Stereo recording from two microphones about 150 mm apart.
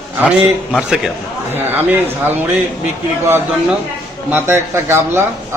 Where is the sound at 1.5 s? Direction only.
15° right (ahead or behind).